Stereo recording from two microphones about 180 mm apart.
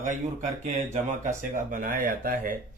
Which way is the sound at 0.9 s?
45° right (ahead or behind).